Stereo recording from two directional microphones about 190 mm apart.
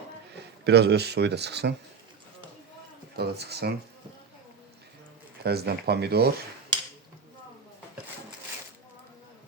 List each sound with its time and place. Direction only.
0.6 s speech: 60° right (ahead or behind)
3.2 s speech: 60° right (ahead or behind)
5.4 s speech: 55° right (ahead or behind)